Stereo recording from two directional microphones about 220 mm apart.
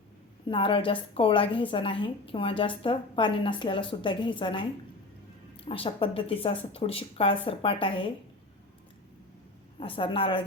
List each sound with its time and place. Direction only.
0.4 s a woman's voice: 25° left (ahead or behind)
9.8 s a woman's voice: 25° left (ahead or behind)